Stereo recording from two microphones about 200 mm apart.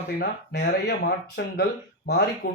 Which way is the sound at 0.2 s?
55° left (ahead or behind).